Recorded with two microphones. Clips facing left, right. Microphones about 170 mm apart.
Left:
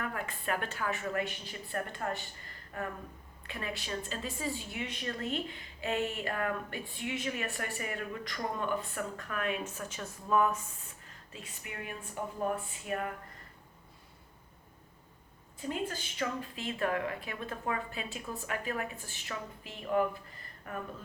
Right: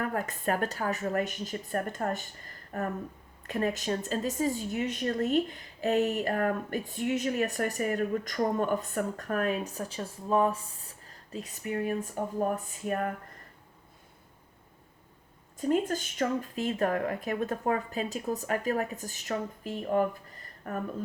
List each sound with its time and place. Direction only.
0.0 s a woman's voice: 45° right (ahead or behind)
15.5 s speech: 45° right (ahead or behind)